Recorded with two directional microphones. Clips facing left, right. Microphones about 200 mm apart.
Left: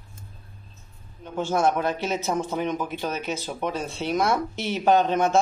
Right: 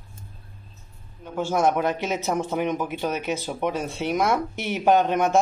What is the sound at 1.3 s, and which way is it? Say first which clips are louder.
Speech: right 1 dB; 15° right (ahead or behind).